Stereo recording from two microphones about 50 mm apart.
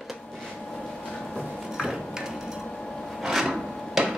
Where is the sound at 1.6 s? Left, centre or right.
Centre.